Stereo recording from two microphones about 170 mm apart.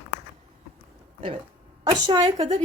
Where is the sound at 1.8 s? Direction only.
25° right (ahead or behind).